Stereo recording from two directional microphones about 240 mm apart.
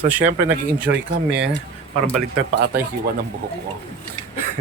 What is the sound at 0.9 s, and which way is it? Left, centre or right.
Speech, right.